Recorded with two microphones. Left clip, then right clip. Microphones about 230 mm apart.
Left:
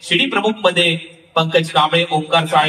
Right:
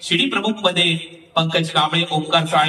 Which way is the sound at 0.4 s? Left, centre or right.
Left.